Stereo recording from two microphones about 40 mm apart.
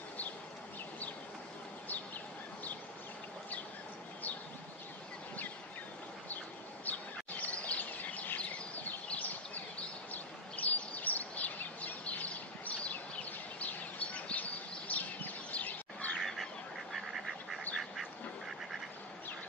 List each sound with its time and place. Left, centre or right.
6.2 s bird: left
13.1 s a sound: left
14.0 s bird: left
17.1 s duck: centre